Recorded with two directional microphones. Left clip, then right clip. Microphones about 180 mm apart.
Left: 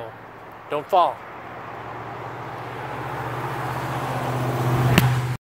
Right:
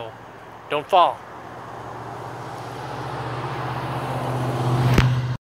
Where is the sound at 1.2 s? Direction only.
50° right (ahead or behind); by 4.7 s 15° right (ahead or behind).